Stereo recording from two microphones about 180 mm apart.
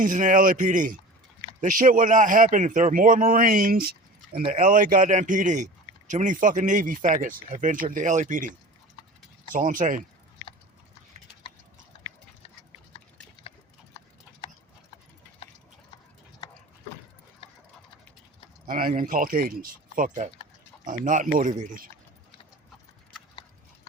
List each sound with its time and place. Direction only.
0.0 s a man's voice: 45° right (ahead or behind)
17.4 s mechanisms: 30° left (ahead or behind)
18.7 s a man's voice: 50° right (ahead or behind)